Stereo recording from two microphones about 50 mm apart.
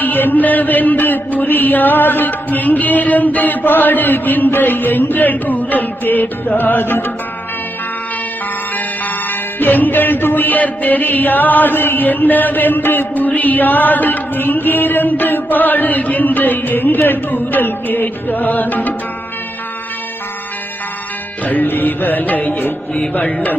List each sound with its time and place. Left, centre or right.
0.0 s music: left
8.7 s music: left
21.4 s music: left